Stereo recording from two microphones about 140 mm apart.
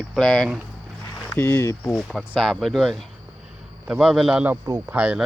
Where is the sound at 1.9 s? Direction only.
5° left (ahead or behind).